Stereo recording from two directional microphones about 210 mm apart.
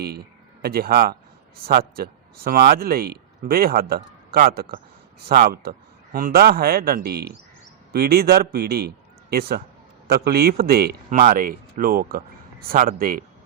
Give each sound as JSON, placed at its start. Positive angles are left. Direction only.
{"t": 0.6, "sound": "speech", "side_deg": -45}